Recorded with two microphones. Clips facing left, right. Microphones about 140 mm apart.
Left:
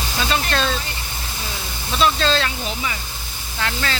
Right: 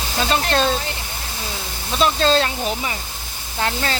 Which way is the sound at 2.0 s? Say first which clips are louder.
Right 2 dB; 40° right (ahead or behind).